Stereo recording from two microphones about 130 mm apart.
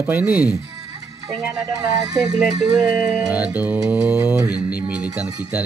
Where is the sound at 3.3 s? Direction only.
10° right (ahead or behind).